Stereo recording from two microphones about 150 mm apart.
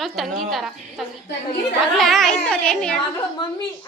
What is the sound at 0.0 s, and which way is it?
A woman's voice, centre (ahead or behind).